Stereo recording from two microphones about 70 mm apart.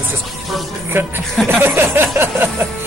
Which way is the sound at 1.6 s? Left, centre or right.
Right.